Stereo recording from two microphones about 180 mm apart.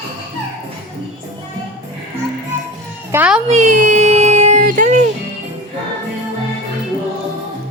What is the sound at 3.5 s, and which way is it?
Music, 45° right (ahead or behind).